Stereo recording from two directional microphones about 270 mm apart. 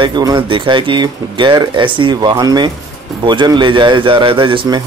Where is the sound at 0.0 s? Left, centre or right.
Centre.